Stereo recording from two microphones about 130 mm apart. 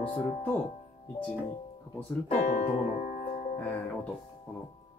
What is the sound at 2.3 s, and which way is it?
Speech, 65° left (ahead or behind).